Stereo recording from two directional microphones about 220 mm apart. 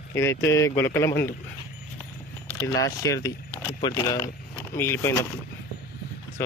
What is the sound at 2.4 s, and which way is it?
Speech, 10° left (ahead or behind).